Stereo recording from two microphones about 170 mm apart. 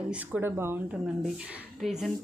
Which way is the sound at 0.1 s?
10° right (ahead or behind).